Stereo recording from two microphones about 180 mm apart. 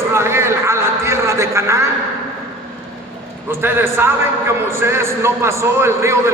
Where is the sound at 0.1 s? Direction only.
15° right (ahead or behind).